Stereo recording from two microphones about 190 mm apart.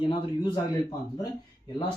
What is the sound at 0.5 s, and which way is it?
Speech, 20° left (ahead or behind).